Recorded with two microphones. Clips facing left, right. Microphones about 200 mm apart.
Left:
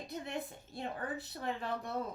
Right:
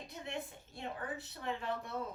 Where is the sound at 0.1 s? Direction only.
35° left (ahead or behind).